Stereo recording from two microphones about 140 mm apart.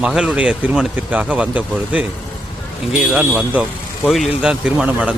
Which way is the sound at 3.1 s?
10° right (ahead or behind).